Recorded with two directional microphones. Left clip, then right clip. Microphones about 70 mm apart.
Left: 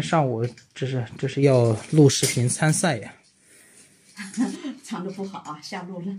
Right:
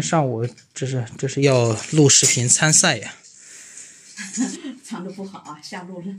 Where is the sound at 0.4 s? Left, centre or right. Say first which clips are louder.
Right 2 dB; left.